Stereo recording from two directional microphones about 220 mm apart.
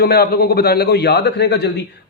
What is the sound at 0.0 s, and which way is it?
A man's voice, 45° left (ahead or behind).